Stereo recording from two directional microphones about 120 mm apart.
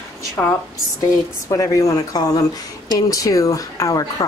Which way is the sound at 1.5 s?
30° left (ahead or behind).